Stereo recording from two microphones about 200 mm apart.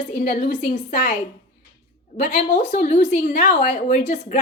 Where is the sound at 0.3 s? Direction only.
40° left (ahead or behind).